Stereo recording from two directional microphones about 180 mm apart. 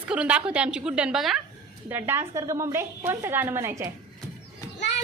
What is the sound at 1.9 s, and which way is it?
A woman's voice, 10° right (ahead or behind).